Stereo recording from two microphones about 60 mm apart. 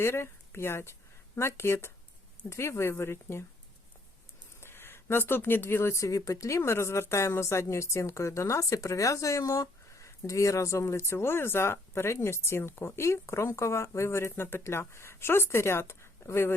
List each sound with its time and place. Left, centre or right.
0.0 s a woman's voice: left
4.6 s speech: left
6.6 s a woman's voice: left